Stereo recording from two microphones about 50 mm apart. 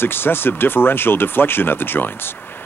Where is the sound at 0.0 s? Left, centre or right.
Left.